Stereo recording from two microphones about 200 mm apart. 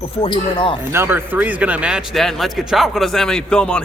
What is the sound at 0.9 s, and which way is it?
Speech, 10° right (ahead or behind).